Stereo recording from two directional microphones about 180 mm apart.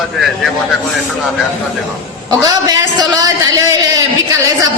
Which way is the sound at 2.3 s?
20° right (ahead or behind).